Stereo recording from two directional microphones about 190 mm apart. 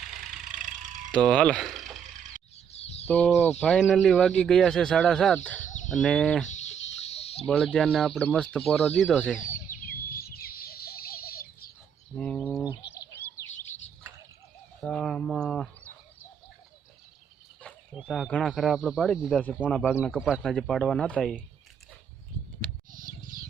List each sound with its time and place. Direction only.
0.6 s a sound: 40° right (ahead or behind)
1.1 s speech: 5° left (ahead or behind)
2.3 s bird: 40° right (ahead or behind)
2.7 s a sound: 35° left (ahead or behind)
3.1 s speech: 10° left (ahead or behind)
6.5 s a sound: 35° left (ahead or behind)
7.4 s speech: 5° left (ahead or behind)
9.6 s bird: 10° left (ahead or behind)
10.2 s chicken: 50° left (ahead or behind)
12.1 s bird: 5° left (ahead or behind)
13.0 s bird: 15° left (ahead or behind)
14.8 s speech: 5° left (ahead or behind)
17.6 s speech: 5° left (ahead or behind)
22.9 s bird: 45° right (ahead or behind)